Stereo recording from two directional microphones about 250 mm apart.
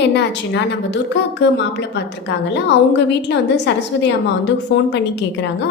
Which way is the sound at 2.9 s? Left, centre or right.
Left.